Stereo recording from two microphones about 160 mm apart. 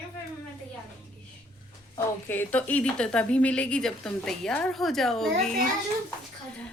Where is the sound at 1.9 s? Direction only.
15° left (ahead or behind).